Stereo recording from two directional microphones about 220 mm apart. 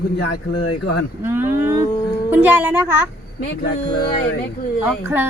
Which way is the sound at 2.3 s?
10° right (ahead or behind).